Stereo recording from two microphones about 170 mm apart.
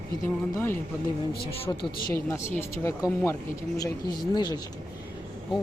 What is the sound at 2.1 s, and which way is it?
Speech, 15° left (ahead or behind).